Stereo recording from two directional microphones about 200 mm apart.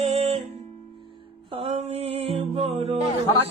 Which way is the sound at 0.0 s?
30° right (ahead or behind).